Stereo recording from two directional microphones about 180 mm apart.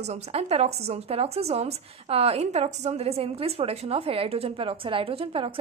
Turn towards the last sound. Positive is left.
turn(degrees=-30)  # may be behind; listen again after turning